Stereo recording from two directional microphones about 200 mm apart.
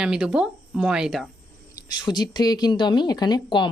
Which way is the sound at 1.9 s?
20° left (ahead or behind).